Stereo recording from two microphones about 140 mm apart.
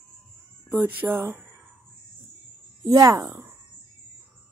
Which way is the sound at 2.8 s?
25° right (ahead or behind).